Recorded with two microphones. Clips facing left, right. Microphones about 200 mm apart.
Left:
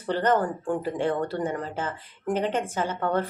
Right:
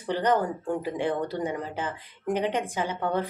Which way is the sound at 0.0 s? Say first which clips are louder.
Left 1 dB; 15° right (ahead or behind).